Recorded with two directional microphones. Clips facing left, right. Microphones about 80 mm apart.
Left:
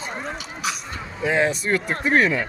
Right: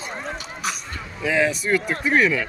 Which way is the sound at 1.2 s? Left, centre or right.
Left.